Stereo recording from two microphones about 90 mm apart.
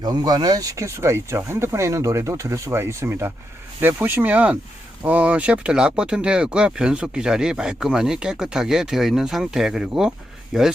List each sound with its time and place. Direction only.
0.0 s speech: 50° right (ahead or behind); by 10.7 s 5° right (ahead or behind)